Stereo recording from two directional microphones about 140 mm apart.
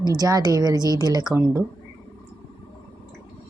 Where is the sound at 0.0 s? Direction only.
25° right (ahead or behind).